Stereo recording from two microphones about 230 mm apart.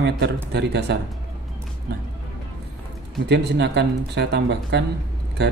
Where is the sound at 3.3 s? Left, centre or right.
Right.